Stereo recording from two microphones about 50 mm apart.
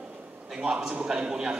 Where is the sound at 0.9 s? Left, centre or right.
Centre.